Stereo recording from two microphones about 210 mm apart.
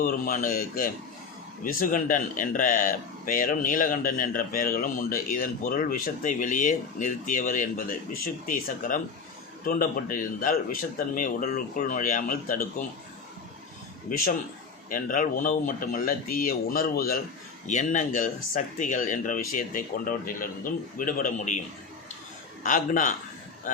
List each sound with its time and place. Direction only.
0.0 s speech: 45° left (ahead or behind)
14.8 s speech: 40° left (ahead or behind)
22.6 s speech: 40° left (ahead or behind)